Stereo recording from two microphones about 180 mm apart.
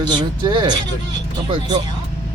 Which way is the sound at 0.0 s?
25° right (ahead or behind).